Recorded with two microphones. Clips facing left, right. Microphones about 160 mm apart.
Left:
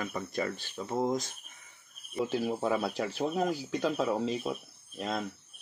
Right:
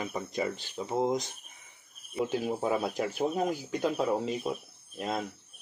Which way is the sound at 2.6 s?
10° right (ahead or behind).